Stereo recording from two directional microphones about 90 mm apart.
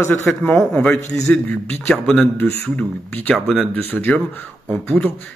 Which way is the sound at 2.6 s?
15° left (ahead or behind).